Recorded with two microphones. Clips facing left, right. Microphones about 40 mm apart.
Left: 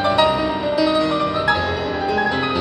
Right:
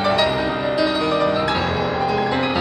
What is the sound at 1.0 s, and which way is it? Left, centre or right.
Music, right.